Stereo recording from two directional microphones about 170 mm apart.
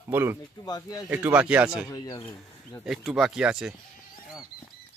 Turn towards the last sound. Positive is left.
turn(degrees=-5)  # may be behind; listen again after turning